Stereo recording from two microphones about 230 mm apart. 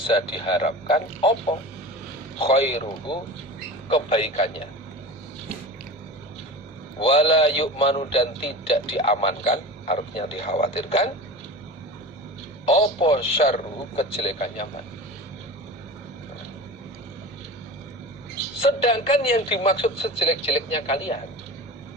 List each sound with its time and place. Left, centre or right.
0.1 s a man's voice: left
7.0 s a man's voice: left
12.6 s a man's voice: left
18.6 s a man's voice: left